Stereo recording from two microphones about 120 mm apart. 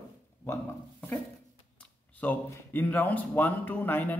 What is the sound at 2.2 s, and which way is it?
A man's voice, 15° left (ahead or behind).